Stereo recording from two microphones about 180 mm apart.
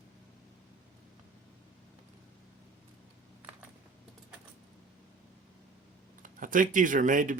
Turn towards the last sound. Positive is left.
turn(degrees=-45)  # may be behind; listen again after turning